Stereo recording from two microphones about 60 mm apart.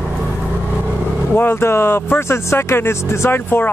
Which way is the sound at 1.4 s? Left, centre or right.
Left.